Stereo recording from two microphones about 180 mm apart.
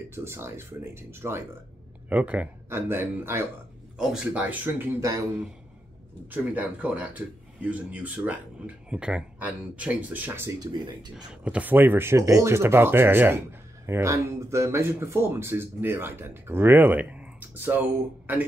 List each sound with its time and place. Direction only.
0.1 s speech: 15° right (ahead or behind)
6.3 s speech: 10° right (ahead or behind)
11.4 s speech: 10° right (ahead or behind)